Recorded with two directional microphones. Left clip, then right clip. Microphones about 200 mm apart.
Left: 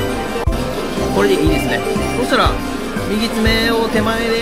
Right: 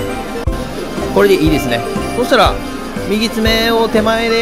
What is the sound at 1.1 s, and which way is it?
Music, 20° right (ahead or behind).